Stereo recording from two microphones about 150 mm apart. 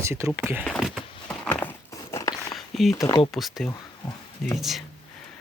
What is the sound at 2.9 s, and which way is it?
Speech, 20° left (ahead or behind).